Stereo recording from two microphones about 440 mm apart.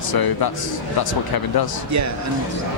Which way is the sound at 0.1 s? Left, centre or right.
Left.